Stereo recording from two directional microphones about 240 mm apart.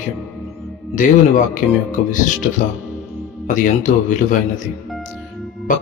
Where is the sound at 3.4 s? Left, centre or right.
Left.